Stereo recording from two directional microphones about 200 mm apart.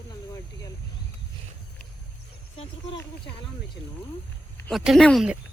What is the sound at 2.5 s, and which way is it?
Speech, 30° left (ahead or behind).